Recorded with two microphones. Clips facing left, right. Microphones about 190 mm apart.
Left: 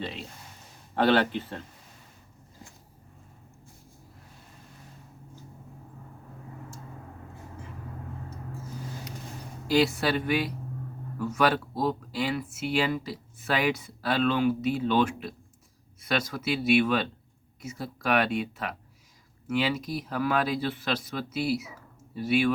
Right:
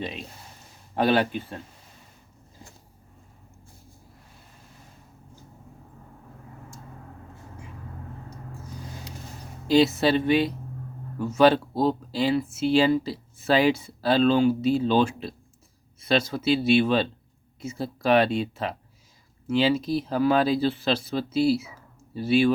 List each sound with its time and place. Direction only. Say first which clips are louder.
0.0 s speech: right 2 dB; 15° right (ahead or behind)
9.6 s speech: right 5 dB; 20° right (ahead or behind)